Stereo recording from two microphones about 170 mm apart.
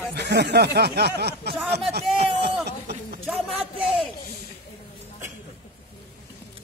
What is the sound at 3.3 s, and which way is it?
Speech, centre (ahead or behind).